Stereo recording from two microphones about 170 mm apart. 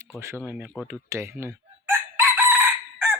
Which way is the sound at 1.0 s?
15° right (ahead or behind).